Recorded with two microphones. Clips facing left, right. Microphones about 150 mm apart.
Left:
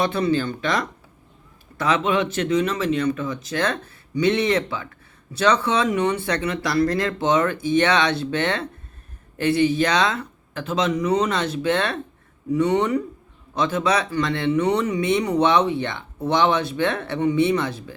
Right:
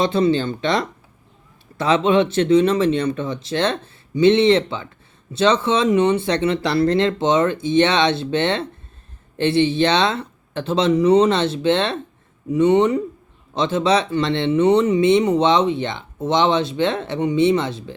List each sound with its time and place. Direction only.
0.0 s speech: 25° right (ahead or behind)